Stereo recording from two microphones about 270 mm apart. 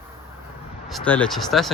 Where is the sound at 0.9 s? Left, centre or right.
Centre.